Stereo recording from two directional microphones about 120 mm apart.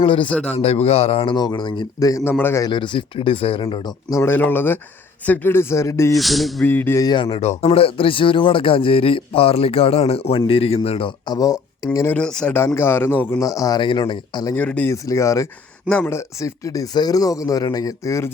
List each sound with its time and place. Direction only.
0.0 s speech: 45° left (ahead or behind); by 2.6 s 20° left (ahead or behind)
2.6 s speech: 40° left (ahead or behind)
4.1 s speech: 20° left (ahead or behind)
6.1 s speech: centre (ahead or behind)
6.7 s speech: 15° left (ahead or behind)
7.0 s speech: 35° left (ahead or behind)
7.3 s speech: 50° left (ahead or behind)
11.3 s speech: 30° left (ahead or behind)
12.1 s speech: 5° left (ahead or behind)
12.5 s speech: 20° left (ahead or behind)
13.4 s speech: 30° left (ahead or behind)
13.8 s speech: 40° left (ahead or behind)
14.5 s speech: 10° left (ahead or behind)
14.8 s speech: 25° left (ahead or behind)